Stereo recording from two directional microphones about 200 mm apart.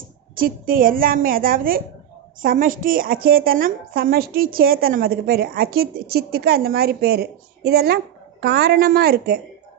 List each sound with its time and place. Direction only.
0.3 s a woman's voice: 45° right (ahead or behind)